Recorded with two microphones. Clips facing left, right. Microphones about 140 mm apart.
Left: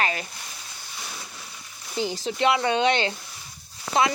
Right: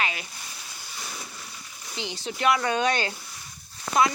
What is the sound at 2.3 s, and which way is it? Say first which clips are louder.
Speech: left 1 dB; 25° left (ahead or behind).